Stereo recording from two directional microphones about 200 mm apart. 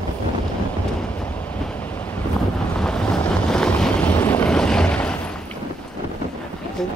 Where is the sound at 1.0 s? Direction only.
5° left (ahead or behind).